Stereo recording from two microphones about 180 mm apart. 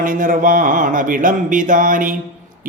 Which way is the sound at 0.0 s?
50° right (ahead or behind).